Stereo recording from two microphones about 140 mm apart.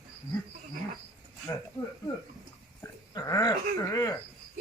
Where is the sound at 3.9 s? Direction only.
25° left (ahead or behind).